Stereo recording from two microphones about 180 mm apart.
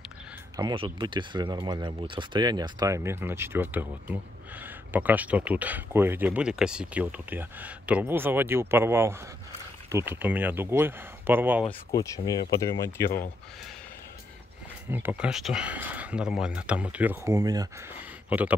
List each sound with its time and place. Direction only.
0.6 s speech: 25° right (ahead or behind)
11.9 s speech: 20° left (ahead or behind)
14.9 s speech: 10° right (ahead or behind)